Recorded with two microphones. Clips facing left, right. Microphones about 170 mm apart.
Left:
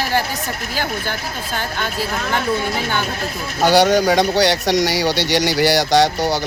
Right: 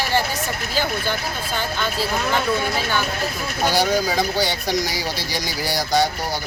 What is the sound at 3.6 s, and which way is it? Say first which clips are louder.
Speech: left 6 dB; 80° left.